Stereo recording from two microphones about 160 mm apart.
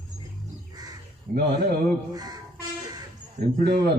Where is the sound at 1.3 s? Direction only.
60° right (ahead or behind).